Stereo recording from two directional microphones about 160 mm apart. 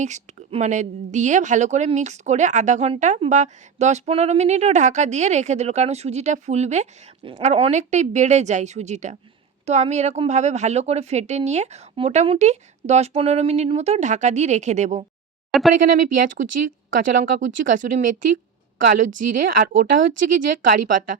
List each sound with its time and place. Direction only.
0.0 s a woman's voice: 45° right (ahead or behind)